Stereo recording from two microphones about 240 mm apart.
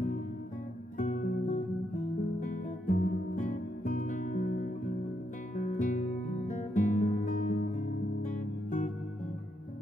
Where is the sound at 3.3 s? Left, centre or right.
Left.